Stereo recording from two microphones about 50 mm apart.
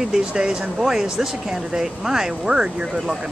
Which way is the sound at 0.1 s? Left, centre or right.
Centre.